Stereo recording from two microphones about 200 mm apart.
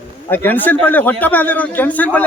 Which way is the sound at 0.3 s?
10° left (ahead or behind).